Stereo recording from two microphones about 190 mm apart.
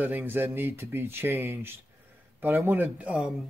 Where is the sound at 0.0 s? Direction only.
10° right (ahead or behind).